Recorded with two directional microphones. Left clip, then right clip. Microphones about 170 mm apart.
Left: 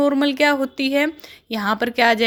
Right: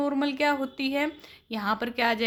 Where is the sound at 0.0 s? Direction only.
35° left (ahead or behind).